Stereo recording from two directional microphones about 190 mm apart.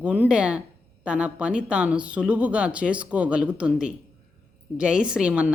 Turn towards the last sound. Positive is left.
turn(degrees=-5)  # may be behind; listen again after turning